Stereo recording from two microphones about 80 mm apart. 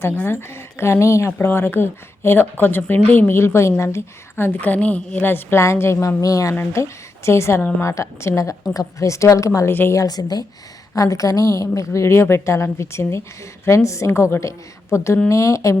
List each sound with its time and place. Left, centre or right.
0.3 s a woman's voice: left
10.9 s a woman's voice: left